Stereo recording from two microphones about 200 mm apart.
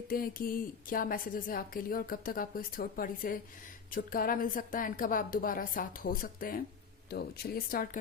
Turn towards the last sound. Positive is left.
turn(degrees=45)  # may be behind; listen again after turning